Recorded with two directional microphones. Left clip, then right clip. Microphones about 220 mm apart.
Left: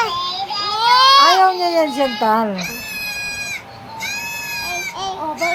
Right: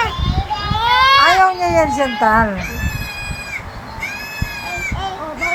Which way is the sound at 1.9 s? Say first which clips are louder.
Right 1 dB; 25° left (ahead or behind).